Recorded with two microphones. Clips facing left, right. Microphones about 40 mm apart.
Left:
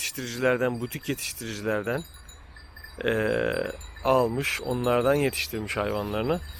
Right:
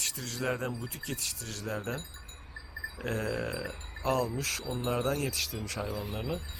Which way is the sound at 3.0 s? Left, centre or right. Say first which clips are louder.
Left 9 dB; left.